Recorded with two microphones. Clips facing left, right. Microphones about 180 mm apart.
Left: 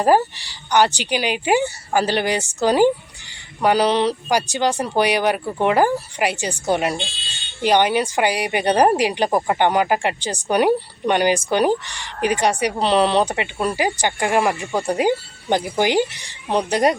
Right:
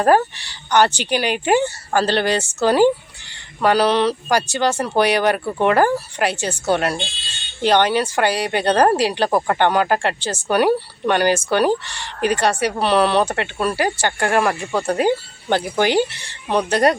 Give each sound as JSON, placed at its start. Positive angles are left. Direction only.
{"t": 0.0, "sound": "speech", "side_deg": 15}